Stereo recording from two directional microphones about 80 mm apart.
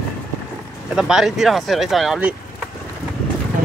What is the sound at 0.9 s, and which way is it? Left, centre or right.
A man's voice, centre.